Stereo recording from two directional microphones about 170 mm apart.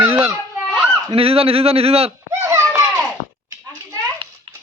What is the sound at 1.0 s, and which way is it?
Speech, 35° right (ahead or behind).